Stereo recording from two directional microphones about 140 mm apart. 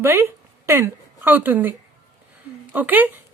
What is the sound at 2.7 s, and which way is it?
Speech, 10° right (ahead or behind).